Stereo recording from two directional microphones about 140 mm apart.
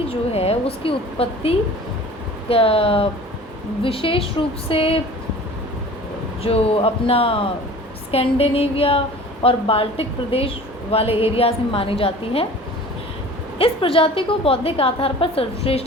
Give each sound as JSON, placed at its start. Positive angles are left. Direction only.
{"t": 0.1, "sound": "a woman's voice", "side_deg": 45}
{"t": 6.4, "sound": "a woman's voice", "side_deg": 45}
{"t": 13.6, "sound": "a woman's voice", "side_deg": 40}